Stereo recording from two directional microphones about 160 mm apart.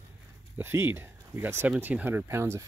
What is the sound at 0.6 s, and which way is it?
Speech, 15° right (ahead or behind).